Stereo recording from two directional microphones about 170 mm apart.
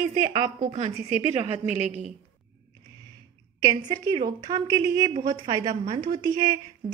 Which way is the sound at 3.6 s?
25° right (ahead or behind).